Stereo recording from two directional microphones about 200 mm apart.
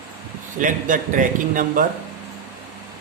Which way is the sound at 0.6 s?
40° right (ahead or behind).